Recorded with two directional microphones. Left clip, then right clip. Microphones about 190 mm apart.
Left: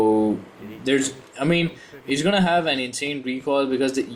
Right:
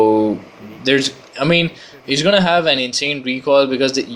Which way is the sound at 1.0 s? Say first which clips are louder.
Right 6 dB; 15° right (ahead or behind).